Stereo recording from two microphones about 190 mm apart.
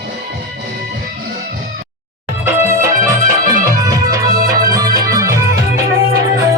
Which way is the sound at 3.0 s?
45° right (ahead or behind).